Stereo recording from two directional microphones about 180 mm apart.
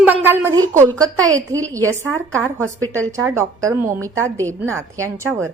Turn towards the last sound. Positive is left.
turn(degrees=-15)  # may be behind; listen again after turning